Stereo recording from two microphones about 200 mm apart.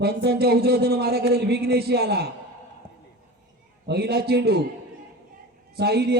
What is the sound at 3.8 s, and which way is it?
Speech, 55° right (ahead or behind).